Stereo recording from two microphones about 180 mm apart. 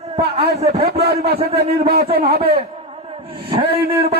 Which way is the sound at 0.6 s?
35° right (ahead or behind).